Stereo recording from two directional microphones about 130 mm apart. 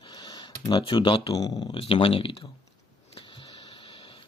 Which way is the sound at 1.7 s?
45° left (ahead or behind).